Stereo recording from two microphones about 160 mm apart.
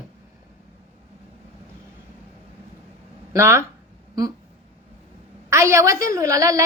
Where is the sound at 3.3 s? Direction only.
15° right (ahead or behind).